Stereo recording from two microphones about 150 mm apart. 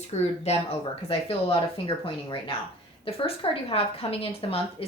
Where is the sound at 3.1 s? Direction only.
40° left (ahead or behind).